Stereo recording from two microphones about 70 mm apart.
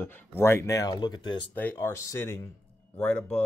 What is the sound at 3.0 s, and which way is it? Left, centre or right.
Speech, centre.